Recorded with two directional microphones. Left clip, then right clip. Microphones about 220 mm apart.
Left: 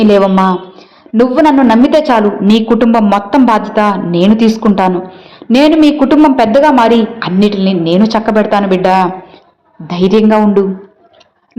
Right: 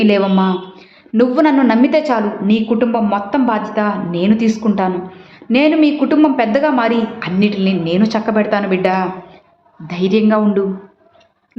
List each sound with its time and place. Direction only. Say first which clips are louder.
0.0 s a man's voice: left 6 dB; 15° left (ahead or behind)